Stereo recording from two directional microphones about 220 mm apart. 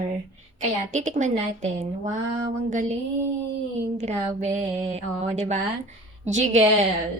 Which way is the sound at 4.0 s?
30° right (ahead or behind).